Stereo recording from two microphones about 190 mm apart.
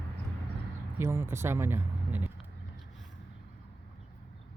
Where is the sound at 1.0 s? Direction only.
15° right (ahead or behind).